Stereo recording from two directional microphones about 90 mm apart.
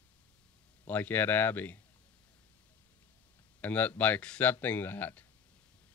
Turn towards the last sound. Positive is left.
turn(degrees=20)  # may be behind; listen again after turning